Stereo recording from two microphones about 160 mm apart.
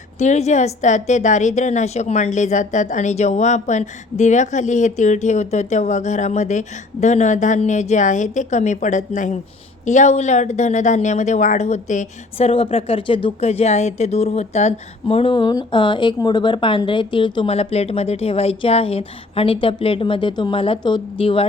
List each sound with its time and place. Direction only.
0.2 s a woman's voice: 45° left (ahead or behind)